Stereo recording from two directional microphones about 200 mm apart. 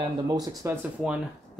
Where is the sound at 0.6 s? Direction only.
10° right (ahead or behind).